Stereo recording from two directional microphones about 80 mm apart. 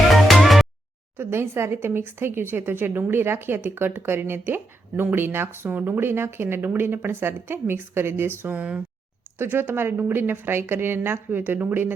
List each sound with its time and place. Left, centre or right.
0.1 s music: centre
1.1 s speech: right
8.5 s speech: centre
9.4 s speech: right